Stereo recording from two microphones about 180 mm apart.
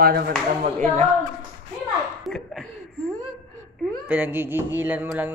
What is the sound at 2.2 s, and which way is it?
Chuckle, centre (ahead or behind).